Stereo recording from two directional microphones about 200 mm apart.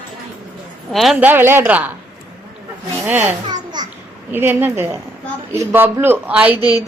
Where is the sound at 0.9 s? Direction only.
Centre (ahead or behind).